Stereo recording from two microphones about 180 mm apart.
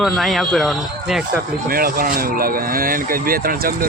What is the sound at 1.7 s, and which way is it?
Speech, 55° right (ahead or behind).